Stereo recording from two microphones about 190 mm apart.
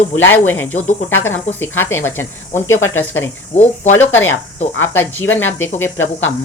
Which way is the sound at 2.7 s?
90° left.